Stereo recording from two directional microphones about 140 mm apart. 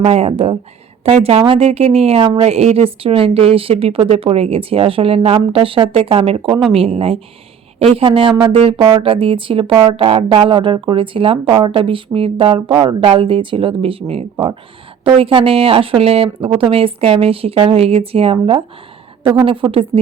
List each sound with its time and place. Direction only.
0.0 s a woman's voice: 45° right (ahead or behind)